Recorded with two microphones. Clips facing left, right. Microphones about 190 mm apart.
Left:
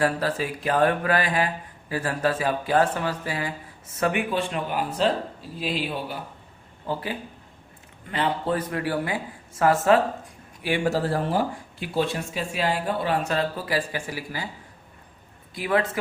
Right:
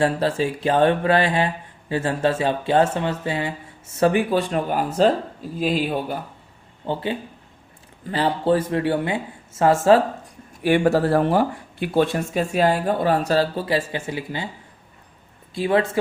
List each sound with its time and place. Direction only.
0.0 s speech: 25° right (ahead or behind); by 6.1 s 45° right (ahead or behind)
6.8 s speech: 25° right (ahead or behind)
10.6 s speech: 55° right (ahead or behind); by 14.5 s 25° right (ahead or behind)
15.5 s speech: 30° right (ahead or behind)